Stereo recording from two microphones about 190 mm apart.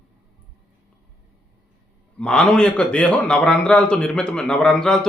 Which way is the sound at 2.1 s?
5° left (ahead or behind).